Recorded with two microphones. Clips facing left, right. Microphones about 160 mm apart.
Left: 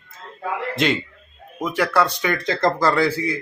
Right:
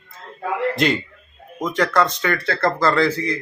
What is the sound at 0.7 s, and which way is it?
A man's voice, centre (ahead or behind).